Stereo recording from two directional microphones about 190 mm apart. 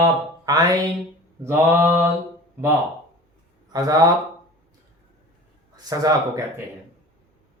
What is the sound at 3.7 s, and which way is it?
Speech, 20° right (ahead or behind).